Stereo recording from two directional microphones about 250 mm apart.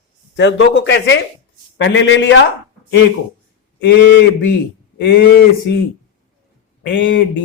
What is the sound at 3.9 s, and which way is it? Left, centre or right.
Speech, left.